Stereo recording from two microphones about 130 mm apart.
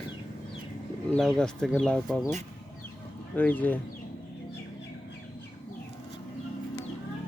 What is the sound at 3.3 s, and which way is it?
Speech, 15° left (ahead or behind).